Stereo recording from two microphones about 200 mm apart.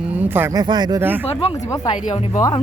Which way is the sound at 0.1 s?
10° right (ahead or behind).